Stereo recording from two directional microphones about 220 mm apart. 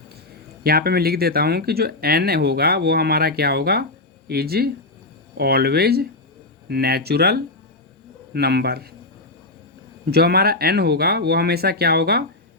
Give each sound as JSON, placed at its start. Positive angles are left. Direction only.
{"t": 0.6, "sound": "speech", "side_deg": -45}
{"t": 10.1, "sound": "speech", "side_deg": -45}